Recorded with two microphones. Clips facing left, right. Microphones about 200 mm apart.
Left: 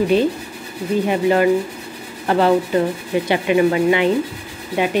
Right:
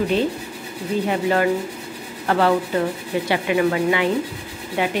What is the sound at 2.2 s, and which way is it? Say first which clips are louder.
Speech: left 3 dB; 20° left (ahead or behind).